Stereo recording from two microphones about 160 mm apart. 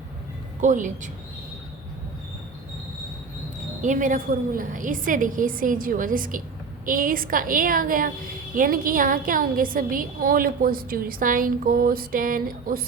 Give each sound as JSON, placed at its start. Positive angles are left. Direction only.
{"t": 0.6, "sound": "speech", "side_deg": -50}
{"t": 3.8, "sound": "a woman's voice", "side_deg": -50}